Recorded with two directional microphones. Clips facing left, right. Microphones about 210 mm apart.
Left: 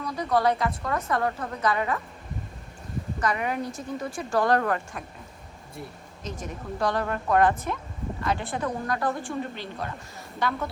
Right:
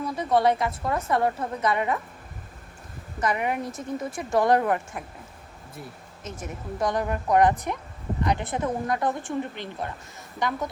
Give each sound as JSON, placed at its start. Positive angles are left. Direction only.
{"t": 0.0, "sound": "a woman's voice", "side_deg": -25}
{"t": 3.2, "sound": "a woman's voice", "side_deg": -20}
{"t": 6.3, "sound": "a woman's voice", "side_deg": -20}